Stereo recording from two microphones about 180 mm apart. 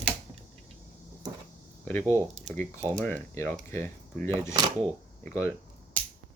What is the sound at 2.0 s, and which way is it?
Speech, 15° right (ahead or behind).